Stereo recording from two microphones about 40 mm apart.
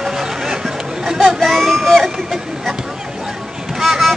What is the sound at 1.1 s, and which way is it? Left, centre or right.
Baby cry, centre.